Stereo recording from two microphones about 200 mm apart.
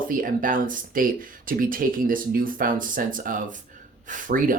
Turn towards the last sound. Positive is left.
turn(degrees=-45)  # may be behind; listen again after turning